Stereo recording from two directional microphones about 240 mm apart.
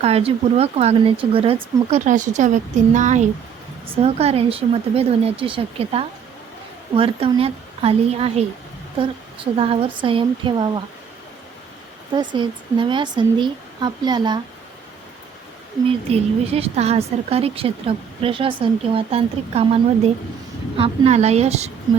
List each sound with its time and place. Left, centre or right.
0.0 s a woman's voice: right
12.1 s a woman's voice: centre
15.9 s a woman's voice: right